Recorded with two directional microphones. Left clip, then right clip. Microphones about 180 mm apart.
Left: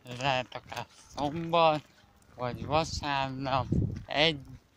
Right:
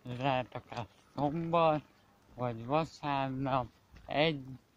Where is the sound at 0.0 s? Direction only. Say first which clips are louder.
Left 3 dB; 10° right (ahead or behind).